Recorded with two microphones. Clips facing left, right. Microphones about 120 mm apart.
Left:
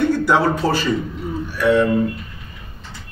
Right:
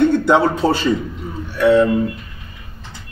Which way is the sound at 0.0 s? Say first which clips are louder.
Right 3 dB; 20° right (ahead or behind).